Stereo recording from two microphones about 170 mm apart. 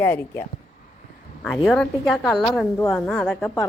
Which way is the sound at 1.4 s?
Centre (ahead or behind).